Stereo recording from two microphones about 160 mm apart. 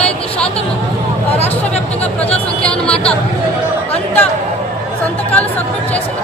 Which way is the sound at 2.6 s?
5° left (ahead or behind).